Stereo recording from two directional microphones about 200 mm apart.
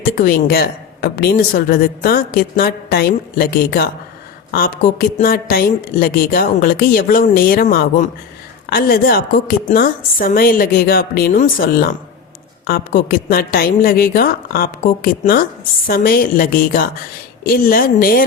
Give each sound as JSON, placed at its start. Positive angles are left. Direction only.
{"t": 0.0, "sound": "a woman's voice", "side_deg": 45}